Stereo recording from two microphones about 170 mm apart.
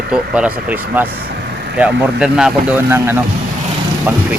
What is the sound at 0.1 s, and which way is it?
Speech, 5° right (ahead or behind).